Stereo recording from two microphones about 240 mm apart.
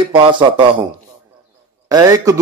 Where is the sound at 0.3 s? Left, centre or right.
Centre.